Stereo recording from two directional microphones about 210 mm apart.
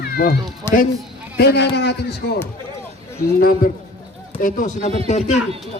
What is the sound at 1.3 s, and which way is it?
Speech, 50° left (ahead or behind).